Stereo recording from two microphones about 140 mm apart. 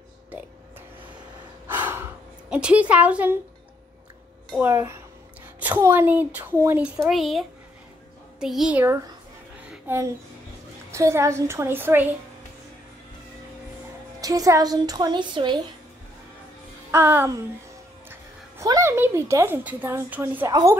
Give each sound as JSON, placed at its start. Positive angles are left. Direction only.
{"t": 1.7, "sound": "gasp", "side_deg": -15}
{"t": 2.5, "sound": "a woman's voice", "side_deg": -10}
{"t": 4.6, "sound": "a woman's voice", "side_deg": -15}
{"t": 7.1, "sound": "a child's voice", "side_deg": 0}
{"t": 9.7, "sound": "a sound", "side_deg": -20}
{"t": 10.9, "sound": "a woman's voice", "side_deg": -20}
{"t": 14.2, "sound": "a woman's voice", "side_deg": -25}
{"t": 16.9, "sound": "a woman's voice", "side_deg": -15}
{"t": 18.6, "sound": "a woman's voice", "side_deg": -20}